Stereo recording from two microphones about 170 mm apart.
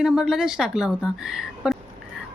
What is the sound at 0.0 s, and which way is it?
Speech, 5° right (ahead or behind).